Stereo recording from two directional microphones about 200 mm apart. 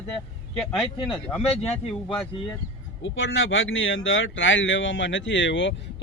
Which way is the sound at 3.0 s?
75° left (ahead or behind).